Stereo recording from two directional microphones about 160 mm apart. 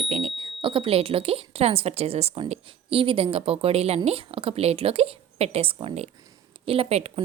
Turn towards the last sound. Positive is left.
turn(degrees=-40)  # may be behind; listen again after turning